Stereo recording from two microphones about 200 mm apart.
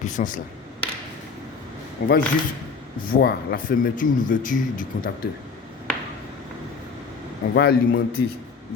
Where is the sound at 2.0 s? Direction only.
45° left (ahead or behind).